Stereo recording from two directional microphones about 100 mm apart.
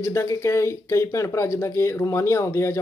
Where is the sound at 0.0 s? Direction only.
30° left (ahead or behind).